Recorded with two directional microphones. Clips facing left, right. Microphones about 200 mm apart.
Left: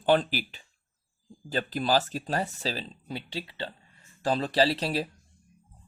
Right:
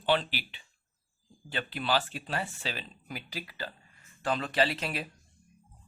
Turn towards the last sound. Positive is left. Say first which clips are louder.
# left 5 dB
turn(degrees=35)  # may be behind; listen again after turning